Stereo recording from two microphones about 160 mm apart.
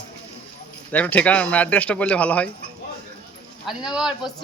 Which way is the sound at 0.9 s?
10° left (ahead or behind).